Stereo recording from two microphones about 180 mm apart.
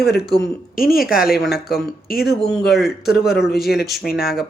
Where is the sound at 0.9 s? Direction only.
Centre (ahead or behind).